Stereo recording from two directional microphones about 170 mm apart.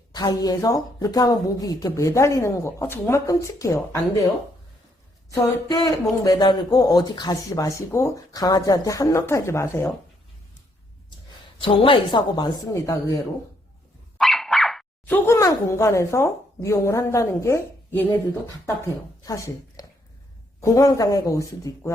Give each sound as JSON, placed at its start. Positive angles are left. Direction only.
{"t": 0.1, "sound": "speech", "side_deg": 20}
{"t": 5.3, "sound": "speech", "side_deg": 25}
{"t": 11.6, "sound": "speech", "side_deg": 30}
{"t": 14.2, "sound": "speech", "side_deg": 0}
{"t": 19.2, "sound": "speech", "side_deg": 20}